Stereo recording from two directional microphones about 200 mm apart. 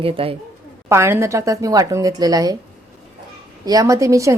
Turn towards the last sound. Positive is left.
turn(degrees=-15)  # may be behind; listen again after turning